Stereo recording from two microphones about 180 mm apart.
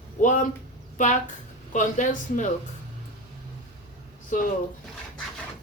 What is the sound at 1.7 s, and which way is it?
Speech, 45° left (ahead or behind).